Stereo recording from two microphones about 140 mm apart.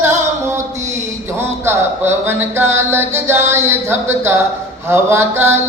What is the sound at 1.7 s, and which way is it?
Music, 15° right (ahead or behind).